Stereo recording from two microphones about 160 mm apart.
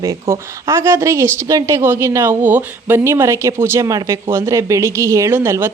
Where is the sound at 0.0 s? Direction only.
20° right (ahead or behind).